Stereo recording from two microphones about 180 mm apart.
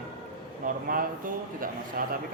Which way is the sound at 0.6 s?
50° right (ahead or behind).